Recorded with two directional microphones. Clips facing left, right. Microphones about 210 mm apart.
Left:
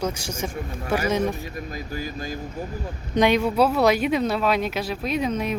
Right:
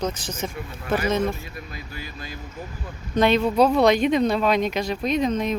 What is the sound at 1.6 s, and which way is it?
Speech, 40° left (ahead or behind).